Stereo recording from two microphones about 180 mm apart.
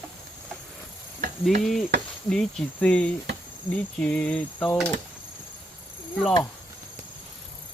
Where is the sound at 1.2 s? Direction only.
45° right (ahead or behind).